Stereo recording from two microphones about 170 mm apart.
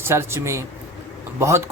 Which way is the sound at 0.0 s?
15° right (ahead or behind).